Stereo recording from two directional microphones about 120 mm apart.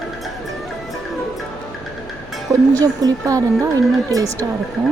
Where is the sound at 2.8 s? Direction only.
30° right (ahead or behind).